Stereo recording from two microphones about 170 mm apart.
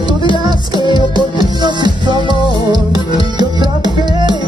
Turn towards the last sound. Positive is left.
turn(degrees=-25)  # may be behind; listen again after turning